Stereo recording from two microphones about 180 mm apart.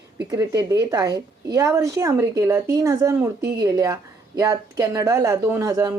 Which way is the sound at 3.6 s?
20° right (ahead or behind).